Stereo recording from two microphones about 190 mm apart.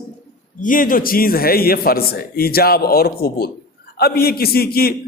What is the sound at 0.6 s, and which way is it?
A man's voice, 45° left (ahead or behind).